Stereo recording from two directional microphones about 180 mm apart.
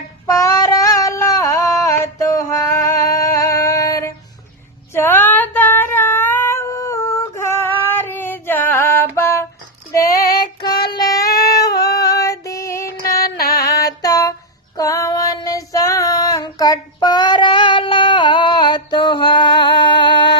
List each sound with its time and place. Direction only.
0.3 s a sound: 15° left (ahead or behind)
4.9 s female singing: 10° left (ahead or behind)
9.9 s child singing: 20° left (ahead or behind)
11.8 s female singing: 20° left (ahead or behind)
12.8 s a sound: 55° left (ahead or behind)
13.7 s female singing: 20° left (ahead or behind)
14.8 s child singing: 15° left (ahead or behind)